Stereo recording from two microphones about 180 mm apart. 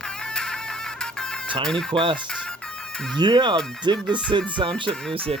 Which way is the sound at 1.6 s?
5° left (ahead or behind).